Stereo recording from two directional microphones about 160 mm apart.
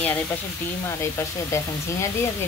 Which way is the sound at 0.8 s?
20° left (ahead or behind).